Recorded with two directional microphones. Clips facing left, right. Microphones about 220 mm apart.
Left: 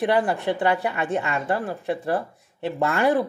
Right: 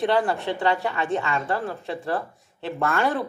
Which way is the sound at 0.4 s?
15° left (ahead or behind).